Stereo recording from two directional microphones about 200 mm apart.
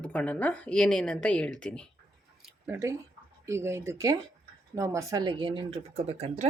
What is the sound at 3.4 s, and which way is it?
Speech, 15° right (ahead or behind).